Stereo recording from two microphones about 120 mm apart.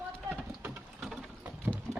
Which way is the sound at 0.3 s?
10° right (ahead or behind).